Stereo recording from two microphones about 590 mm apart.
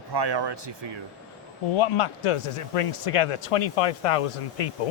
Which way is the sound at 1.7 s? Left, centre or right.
Left.